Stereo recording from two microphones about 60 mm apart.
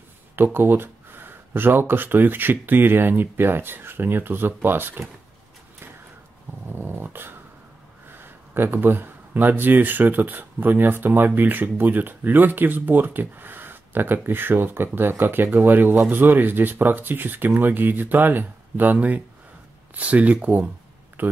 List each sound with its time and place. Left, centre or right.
0.4 s speech: right
6.7 s speech: right
8.5 s speech: right